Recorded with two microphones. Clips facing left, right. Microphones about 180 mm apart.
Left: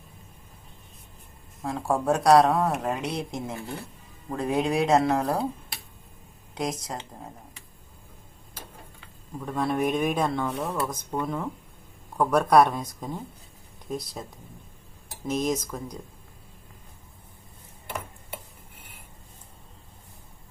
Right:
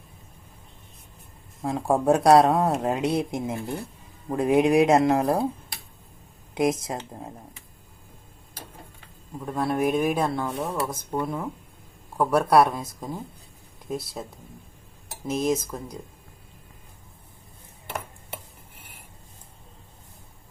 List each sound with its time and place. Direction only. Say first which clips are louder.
1.6 s speech: right 4 dB; 20° right (ahead or behind)
6.5 s speech: right 7 dB; 25° right (ahead or behind)
9.4 s speech: right 1 dB; 10° right (ahead or behind)
15.3 s speech: right 2 dB; 10° right (ahead or behind)